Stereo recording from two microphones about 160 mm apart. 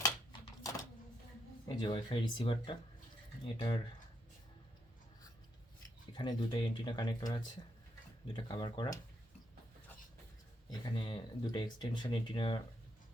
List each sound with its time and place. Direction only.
0.0 s typewriter: 25° left (ahead or behind)
1.6 s speech: 30° left (ahead or behind)
6.1 s speech: 30° left (ahead or behind)
10.7 s speech: 30° left (ahead or behind)